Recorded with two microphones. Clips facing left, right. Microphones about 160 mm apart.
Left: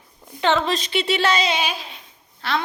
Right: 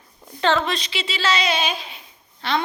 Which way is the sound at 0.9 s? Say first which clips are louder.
Left 7 dB; 60° left (ahead or behind).